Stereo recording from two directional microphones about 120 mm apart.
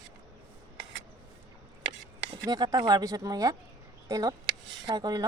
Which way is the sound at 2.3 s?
35° right (ahead or behind).